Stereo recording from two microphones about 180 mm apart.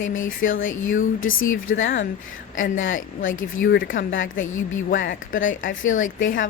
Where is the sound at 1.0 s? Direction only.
90° left.